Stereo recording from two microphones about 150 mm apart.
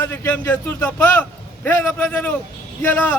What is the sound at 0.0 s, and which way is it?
A man's voice, 15° left (ahead or behind).